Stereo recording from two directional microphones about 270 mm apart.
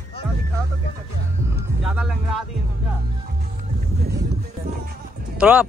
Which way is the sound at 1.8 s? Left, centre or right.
Centre.